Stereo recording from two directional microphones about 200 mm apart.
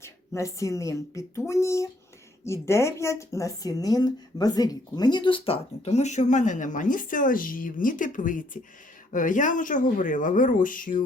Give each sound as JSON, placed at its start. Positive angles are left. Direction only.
{"t": 0.0, "sound": "speech", "side_deg": 15}